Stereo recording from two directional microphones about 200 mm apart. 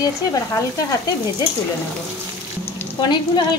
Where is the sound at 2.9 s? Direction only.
20° left (ahead or behind).